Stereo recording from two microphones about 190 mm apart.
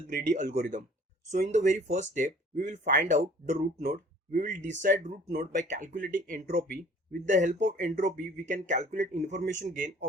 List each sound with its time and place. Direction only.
0.4 s speech: 55° right (ahead or behind)
1.5 s speech: 40° right (ahead or behind)